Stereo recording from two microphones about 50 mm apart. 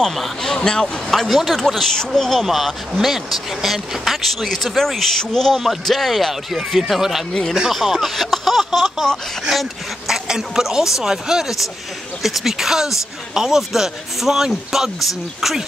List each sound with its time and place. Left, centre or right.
0.0 s speech: centre
0.6 s speech: centre
1.1 s speech: centre
2.4 s speech: centre
7.7 s a sound: centre
9.5 s speech: centre